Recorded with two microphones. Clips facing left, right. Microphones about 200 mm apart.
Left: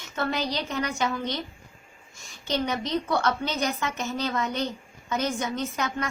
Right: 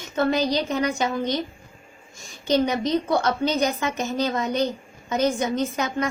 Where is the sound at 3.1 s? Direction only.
20° right (ahead or behind).